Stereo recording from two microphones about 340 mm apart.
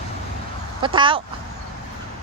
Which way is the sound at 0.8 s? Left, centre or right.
Centre.